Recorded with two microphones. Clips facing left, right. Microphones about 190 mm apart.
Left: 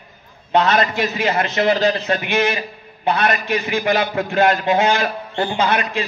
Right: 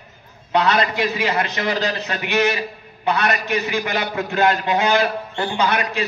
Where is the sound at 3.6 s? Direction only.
30° left (ahead or behind).